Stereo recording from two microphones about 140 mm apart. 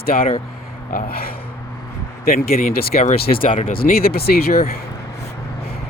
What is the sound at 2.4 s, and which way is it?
Speech, 90° left.